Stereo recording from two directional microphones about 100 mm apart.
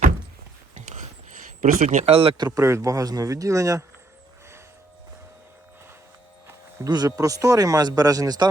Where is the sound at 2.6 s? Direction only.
30° right (ahead or behind).